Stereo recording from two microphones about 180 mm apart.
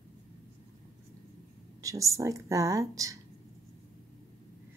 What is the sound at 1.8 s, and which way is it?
Speech, 15° right (ahead or behind).